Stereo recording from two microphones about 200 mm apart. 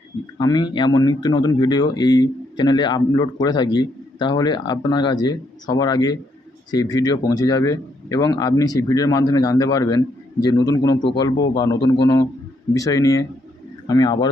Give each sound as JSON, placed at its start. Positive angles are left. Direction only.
{"t": 0.3, "sound": "speech", "side_deg": 20}